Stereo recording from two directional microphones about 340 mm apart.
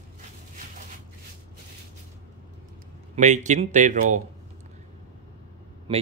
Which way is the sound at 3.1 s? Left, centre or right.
Right.